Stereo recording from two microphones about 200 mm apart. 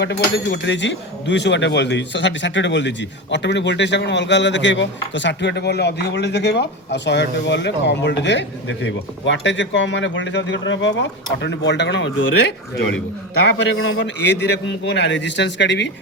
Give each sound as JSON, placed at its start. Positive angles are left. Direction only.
{"t": 0.0, "sound": "speech", "side_deg": 60}